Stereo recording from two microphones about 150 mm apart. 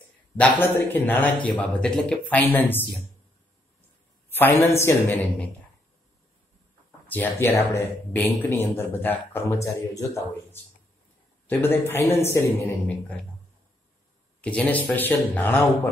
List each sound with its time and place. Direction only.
0.4 s a man's voice: 15° left (ahead or behind)
4.3 s a man's voice: 15° left (ahead or behind)
7.1 s a man's voice: 10° left (ahead or behind)
11.4 s a man's voice: 15° left (ahead or behind)
14.4 s a man's voice: 10° left (ahead or behind)